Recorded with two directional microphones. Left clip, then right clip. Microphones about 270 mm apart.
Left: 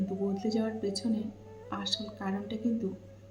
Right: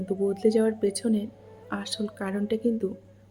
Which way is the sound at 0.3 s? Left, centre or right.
Right.